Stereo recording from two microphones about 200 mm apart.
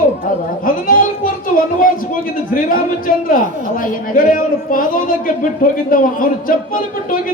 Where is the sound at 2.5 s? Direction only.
45° left (ahead or behind).